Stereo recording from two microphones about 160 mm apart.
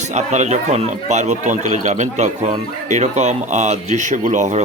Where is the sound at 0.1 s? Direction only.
45° right (ahead or behind).